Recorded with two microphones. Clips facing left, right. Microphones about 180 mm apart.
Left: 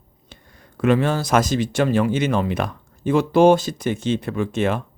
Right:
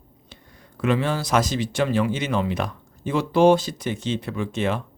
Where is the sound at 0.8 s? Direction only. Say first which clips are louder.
Left 4 dB; 50° left (ahead or behind).